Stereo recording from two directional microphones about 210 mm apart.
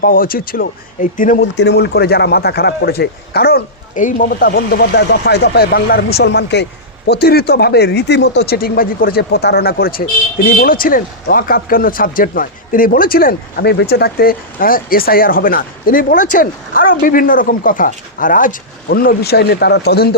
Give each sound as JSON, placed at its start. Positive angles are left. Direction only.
{"t": 0.0, "sound": "a man's voice", "side_deg": 45}
{"t": 1.5, "sound": "a man's voice", "side_deg": 55}